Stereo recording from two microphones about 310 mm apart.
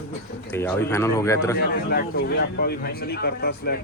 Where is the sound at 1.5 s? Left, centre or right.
Left.